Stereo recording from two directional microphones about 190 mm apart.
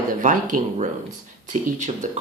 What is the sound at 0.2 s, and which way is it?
Speech, 45° right (ahead or behind).